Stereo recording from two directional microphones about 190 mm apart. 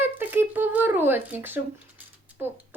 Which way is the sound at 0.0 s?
10° right (ahead or behind).